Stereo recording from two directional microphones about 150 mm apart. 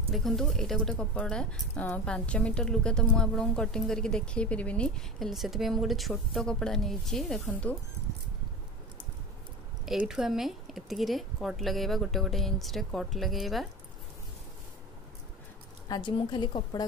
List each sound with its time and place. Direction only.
0.1 s speech: centre (ahead or behind)
9.8 s speech: 5° right (ahead or behind)
15.9 s a woman's voice: 30° left (ahead or behind)